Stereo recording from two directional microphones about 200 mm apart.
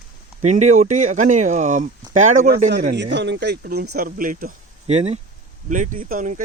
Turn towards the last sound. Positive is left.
turn(degrees=-40)  # may be behind; listen again after turning